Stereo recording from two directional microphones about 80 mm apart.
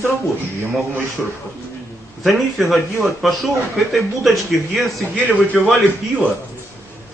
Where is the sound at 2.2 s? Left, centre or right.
Centre.